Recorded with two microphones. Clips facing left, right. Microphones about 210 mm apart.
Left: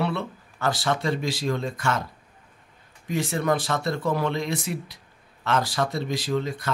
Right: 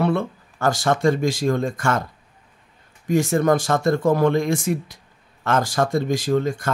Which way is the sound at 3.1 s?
45° right (ahead or behind).